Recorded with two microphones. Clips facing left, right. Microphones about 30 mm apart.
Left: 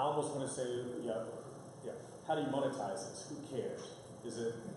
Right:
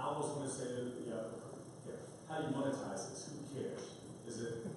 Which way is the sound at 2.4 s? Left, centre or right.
Centre.